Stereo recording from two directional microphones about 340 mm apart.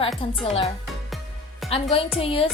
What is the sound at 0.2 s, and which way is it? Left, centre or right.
Speech, centre.